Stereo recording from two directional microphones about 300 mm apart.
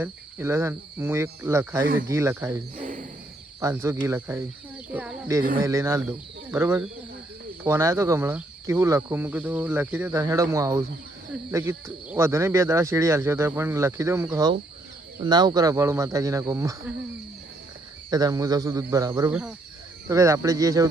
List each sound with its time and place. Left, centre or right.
0.0 s speech: centre
2.7 s a sound: right
3.6 s speech: centre
18.1 s speech: centre